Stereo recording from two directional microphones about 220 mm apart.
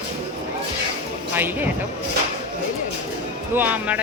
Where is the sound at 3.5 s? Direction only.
10° right (ahead or behind).